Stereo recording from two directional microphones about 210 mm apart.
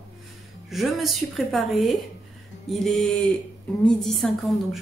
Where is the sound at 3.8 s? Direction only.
Centre (ahead or behind).